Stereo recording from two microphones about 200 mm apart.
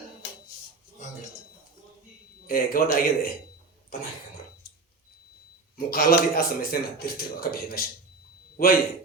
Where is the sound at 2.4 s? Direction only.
45° left (ahead or behind).